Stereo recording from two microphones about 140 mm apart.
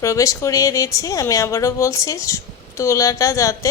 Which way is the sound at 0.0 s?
20° left (ahead or behind).